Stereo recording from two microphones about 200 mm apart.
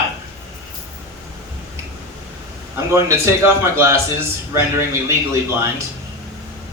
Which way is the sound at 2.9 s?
15° right (ahead or behind).